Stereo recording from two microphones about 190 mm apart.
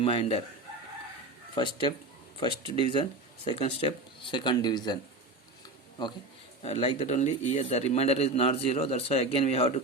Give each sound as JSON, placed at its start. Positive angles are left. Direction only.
{"t": 0.0, "sound": "speech", "side_deg": 25}
{"t": 1.5, "sound": "speech", "side_deg": 25}
{"t": 6.6, "sound": "a man's voice", "side_deg": 30}